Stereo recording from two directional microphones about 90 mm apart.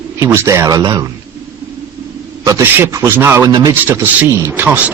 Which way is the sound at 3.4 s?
45° right (ahead or behind).